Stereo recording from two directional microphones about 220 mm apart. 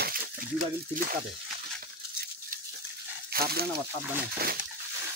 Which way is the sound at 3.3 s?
45° right (ahead or behind).